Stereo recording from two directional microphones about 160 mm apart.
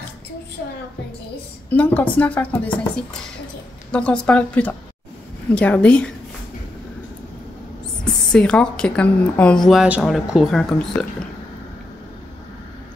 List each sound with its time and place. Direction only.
1.7 s a woman's voice: 10° left (ahead or behind)
8.0 s a woman's voice: 5° left (ahead or behind)